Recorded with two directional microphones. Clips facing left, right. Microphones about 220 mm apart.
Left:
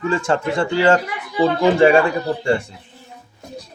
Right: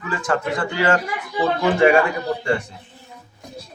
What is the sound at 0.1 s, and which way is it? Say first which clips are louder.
Speech: left 1 dB; 25° left (ahead or behind).